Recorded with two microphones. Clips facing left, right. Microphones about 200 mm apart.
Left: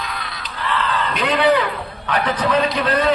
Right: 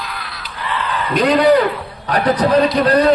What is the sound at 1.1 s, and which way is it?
A man's voice, 35° right (ahead or behind).